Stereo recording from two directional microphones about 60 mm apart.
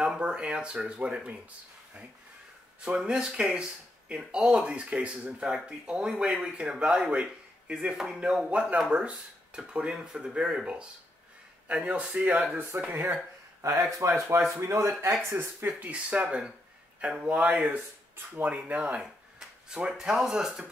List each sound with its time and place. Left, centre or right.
0.0 s speech: centre
2.8 s speech: centre
12.9 s speech: right
15.2 s speech: right
15.9 s speech: right
19.4 s a sound: centre
19.9 s speech: centre